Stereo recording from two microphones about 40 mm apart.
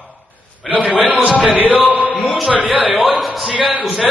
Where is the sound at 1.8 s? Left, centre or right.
Left.